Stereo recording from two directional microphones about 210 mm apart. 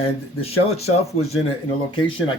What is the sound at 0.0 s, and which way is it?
Speech, 30° left (ahead or behind).